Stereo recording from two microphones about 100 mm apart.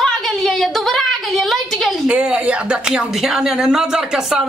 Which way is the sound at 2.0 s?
15° right (ahead or behind).